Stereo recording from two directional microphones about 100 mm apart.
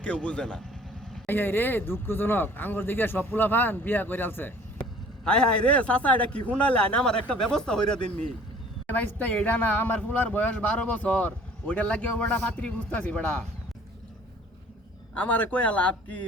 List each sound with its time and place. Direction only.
0.0 s speech: 10° left (ahead or behind)
15.1 s speech: 15° left (ahead or behind)